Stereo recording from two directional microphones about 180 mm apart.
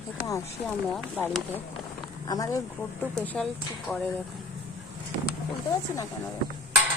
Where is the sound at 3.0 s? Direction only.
5° left (ahead or behind).